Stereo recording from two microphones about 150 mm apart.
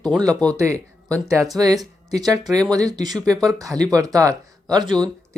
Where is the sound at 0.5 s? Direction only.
20° right (ahead or behind).